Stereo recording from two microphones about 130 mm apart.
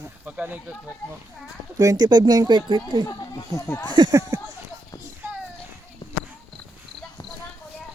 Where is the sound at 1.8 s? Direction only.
30° right (ahead or behind).